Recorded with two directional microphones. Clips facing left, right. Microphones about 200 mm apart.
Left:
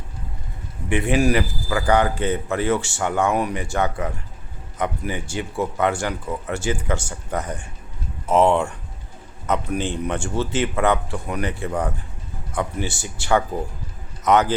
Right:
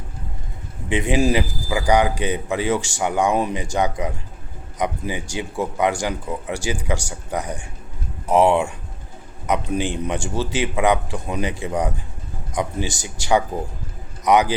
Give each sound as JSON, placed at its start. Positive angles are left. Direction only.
{"t": 0.9, "sound": "a man's voice", "side_deg": -15}